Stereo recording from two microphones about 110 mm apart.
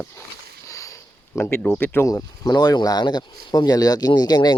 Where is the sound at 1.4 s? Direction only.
15° left (ahead or behind).